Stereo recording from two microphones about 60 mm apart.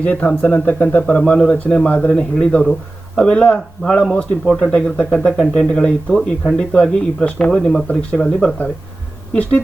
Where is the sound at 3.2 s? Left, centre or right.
Centre.